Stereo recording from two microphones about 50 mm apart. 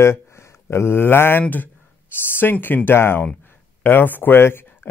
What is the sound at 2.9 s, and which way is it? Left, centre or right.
Speech, left.